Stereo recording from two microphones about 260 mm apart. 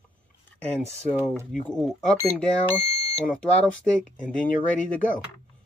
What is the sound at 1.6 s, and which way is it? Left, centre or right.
Speech, centre.